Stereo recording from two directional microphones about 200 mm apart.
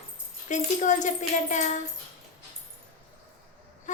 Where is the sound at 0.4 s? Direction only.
40° left (ahead or behind).